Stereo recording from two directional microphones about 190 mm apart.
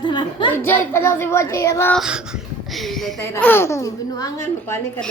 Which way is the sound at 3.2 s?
10° left (ahead or behind).